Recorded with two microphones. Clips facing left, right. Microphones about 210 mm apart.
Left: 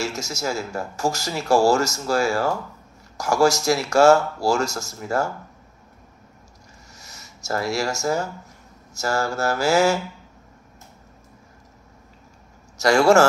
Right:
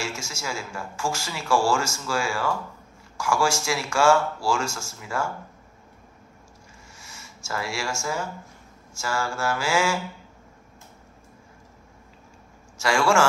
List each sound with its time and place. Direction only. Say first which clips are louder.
0.0 s speech: left 6 dB; 40° left (ahead or behind)
7.0 s a sound: even; 40° left (ahead or behind)
8.9 s speech: left 5 dB; 40° left (ahead or behind)
12.7 s speech: left 6 dB; 40° left (ahead or behind)